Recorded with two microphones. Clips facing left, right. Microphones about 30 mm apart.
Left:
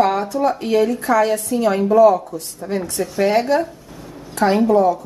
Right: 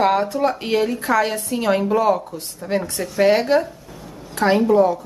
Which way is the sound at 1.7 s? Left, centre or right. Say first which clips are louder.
Even; right.